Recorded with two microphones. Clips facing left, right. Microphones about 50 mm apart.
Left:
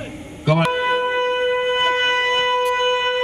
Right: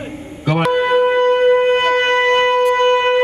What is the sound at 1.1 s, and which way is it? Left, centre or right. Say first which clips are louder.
Wind instrument: right 7 dB; centre.